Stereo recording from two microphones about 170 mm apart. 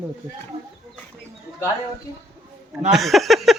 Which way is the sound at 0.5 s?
35° right (ahead or behind).